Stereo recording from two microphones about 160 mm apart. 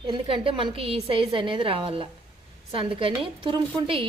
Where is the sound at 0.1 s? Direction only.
30° right (ahead or behind).